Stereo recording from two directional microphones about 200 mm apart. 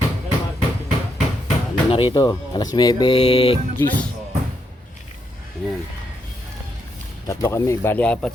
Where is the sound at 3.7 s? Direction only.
10° left (ahead or behind).